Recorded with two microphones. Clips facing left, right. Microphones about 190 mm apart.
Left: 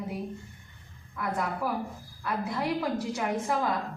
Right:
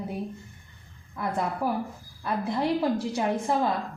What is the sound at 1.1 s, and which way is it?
A woman's voice, 30° right (ahead or behind).